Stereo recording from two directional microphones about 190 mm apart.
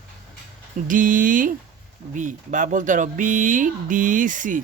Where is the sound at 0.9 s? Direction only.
45° right (ahead or behind).